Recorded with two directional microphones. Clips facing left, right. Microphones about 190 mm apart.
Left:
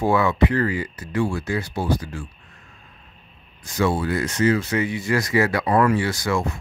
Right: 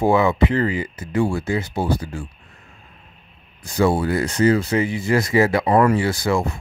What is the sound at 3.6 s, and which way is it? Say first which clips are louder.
Speech: right 3 dB; 30° right (ahead or behind).